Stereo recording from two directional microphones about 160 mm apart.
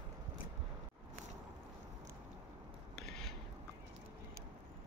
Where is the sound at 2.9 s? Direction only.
Centre (ahead or behind).